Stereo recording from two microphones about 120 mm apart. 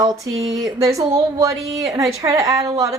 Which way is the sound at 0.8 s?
25° right (ahead or behind).